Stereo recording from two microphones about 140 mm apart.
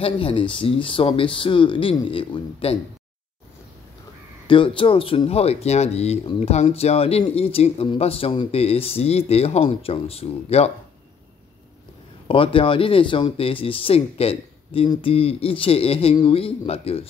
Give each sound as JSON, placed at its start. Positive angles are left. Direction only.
{"t": 0.0, "sound": "speech", "side_deg": 40}
{"t": 4.5, "sound": "speech", "side_deg": 35}
{"t": 12.3, "sound": "speech", "side_deg": 40}